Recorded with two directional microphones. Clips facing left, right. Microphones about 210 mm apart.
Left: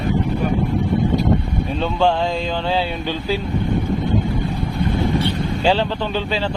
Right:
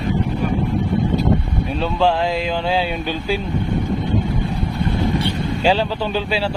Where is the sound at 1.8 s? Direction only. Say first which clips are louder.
Even; 5° right (ahead or behind).